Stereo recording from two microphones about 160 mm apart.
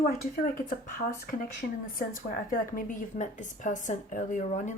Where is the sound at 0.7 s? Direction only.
60° left (ahead or behind).